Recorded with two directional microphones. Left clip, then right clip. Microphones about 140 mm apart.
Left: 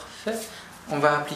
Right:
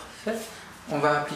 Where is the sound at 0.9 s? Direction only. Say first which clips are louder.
Left 1 dB; 20° left (ahead or behind).